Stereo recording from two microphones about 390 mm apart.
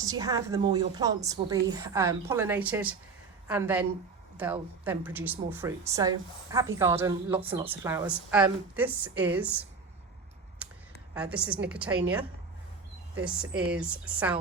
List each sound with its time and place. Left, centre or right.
0.0 s a woman's voice: centre
11.1 s speech: centre
13.1 s speech: centre